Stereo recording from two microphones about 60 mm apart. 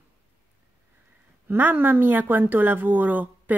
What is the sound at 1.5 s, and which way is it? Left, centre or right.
A woman's voice, right.